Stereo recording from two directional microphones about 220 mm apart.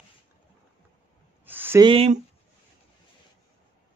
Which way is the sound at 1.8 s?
25° right (ahead or behind).